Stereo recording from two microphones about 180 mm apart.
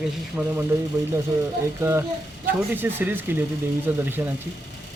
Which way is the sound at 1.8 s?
15° right (ahead or behind).